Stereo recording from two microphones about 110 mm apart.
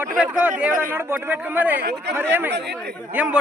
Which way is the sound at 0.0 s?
15° right (ahead or behind).